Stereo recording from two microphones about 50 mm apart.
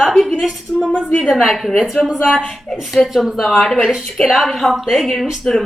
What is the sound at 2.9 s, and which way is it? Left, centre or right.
A woman's voice, centre.